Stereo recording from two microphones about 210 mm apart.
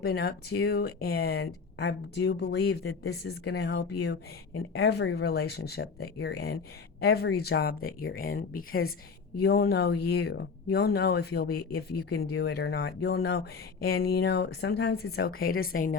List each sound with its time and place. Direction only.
0.0 s speech: 50° left (ahead or behind)